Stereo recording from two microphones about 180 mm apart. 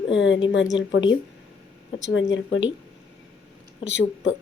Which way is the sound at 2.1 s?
90° left.